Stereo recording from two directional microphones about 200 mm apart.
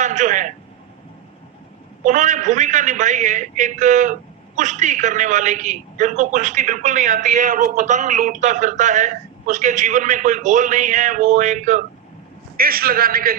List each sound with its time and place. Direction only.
0.0 s a man's voice: 40° right (ahead or behind)
2.0 s a man's voice: 40° right (ahead or behind)